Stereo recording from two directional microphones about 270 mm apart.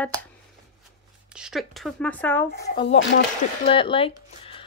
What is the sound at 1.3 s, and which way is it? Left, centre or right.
Speech, centre.